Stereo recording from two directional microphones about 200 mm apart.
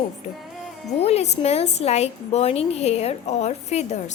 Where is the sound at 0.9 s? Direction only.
30° left (ahead or behind).